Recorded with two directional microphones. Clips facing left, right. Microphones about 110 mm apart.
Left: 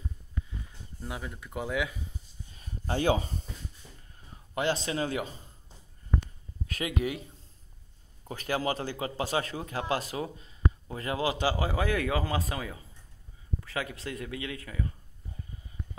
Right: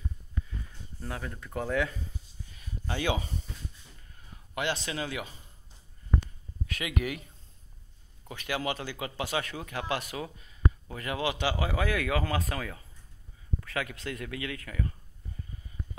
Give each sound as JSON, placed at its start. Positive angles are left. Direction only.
{"t": 1.0, "sound": "speech", "side_deg": 10}
{"t": 2.4, "sound": "a sound", "side_deg": 35}
{"t": 4.6, "sound": "speech", "side_deg": 35}
{"t": 6.7, "sound": "speech", "side_deg": 30}
{"t": 8.3, "sound": "speech", "side_deg": 35}